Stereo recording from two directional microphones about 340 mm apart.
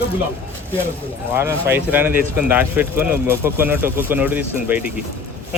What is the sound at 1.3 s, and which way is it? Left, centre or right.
Speech, centre.